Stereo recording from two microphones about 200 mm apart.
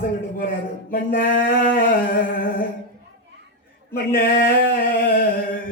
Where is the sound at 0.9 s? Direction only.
45° left (ahead or behind).